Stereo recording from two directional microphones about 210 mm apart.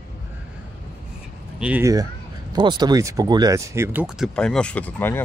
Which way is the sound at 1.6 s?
10° right (ahead or behind).